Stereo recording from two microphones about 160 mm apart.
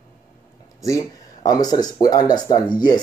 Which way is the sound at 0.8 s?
20° left (ahead or behind).